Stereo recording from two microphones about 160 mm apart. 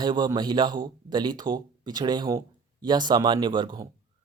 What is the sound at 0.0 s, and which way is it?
Speech, 25° right (ahead or behind).